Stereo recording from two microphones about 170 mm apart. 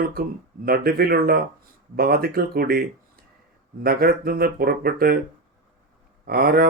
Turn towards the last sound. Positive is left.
turn(degrees=-65)  # may be behind; listen again after turning